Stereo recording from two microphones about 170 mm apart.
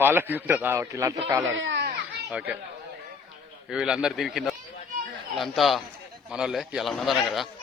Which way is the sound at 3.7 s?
5° right (ahead or behind).